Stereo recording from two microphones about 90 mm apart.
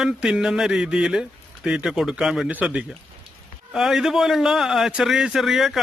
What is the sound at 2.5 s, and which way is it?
Speech, 20° right (ahead or behind).